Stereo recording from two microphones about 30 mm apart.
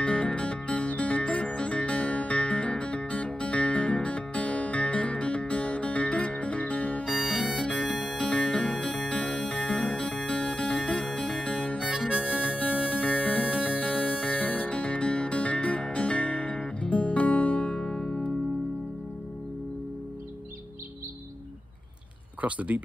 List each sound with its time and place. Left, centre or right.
0.0 s music: left
7.2 s music: centre
7.8 s music: left
8.2 s music: left
12.1 s harmonica: right
12.4 s harmonica: left
12.6 s music: left
14.3 s music: left
14.7 s music: left
17.8 s music: left
22.4 s speech: right